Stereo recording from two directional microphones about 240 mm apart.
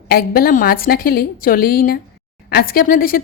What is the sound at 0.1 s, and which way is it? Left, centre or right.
Speech, left.